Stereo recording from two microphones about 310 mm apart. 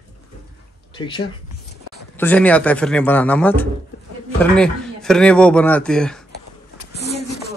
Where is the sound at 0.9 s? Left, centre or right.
Centre.